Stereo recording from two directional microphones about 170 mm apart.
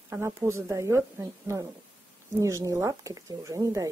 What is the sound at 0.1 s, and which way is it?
Speech, 15° right (ahead or behind).